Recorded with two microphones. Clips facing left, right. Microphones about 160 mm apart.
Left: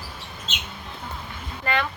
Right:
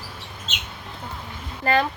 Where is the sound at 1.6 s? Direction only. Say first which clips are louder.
Right 5 dB; 35° right (ahead or behind).